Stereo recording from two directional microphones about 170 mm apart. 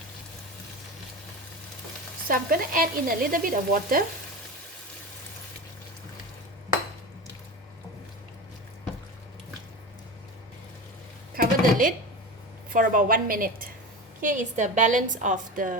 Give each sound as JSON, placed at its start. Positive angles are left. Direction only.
{"t": 2.2, "sound": "stir", "side_deg": -55}
{"t": 11.3, "sound": "a sound", "side_deg": -55}
{"t": 12.7, "sound": "stir", "side_deg": -55}
{"t": 14.2, "sound": "a woman's voice", "side_deg": -50}